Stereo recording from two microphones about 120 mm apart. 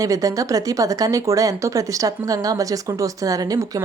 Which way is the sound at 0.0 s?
30° right (ahead or behind).